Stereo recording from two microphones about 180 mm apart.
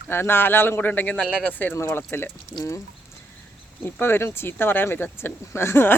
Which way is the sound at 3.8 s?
10° left (ahead or behind).